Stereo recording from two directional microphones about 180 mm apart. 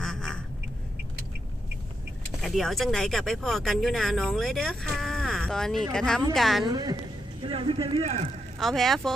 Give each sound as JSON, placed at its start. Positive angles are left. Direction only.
{"t": 0.0, "sound": "quack", "side_deg": 5}
{"t": 2.4, "sound": "speech", "side_deg": 0}
{"t": 6.7, "sound": "a woman's voice", "side_deg": -20}
{"t": 8.5, "sound": "speech", "side_deg": 0}